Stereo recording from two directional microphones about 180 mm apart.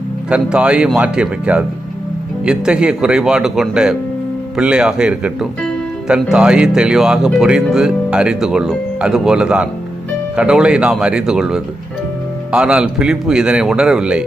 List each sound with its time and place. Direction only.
0.3 s speech: 5° right (ahead or behind)